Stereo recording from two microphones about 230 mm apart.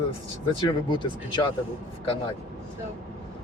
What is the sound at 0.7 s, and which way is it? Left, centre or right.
Speech, left.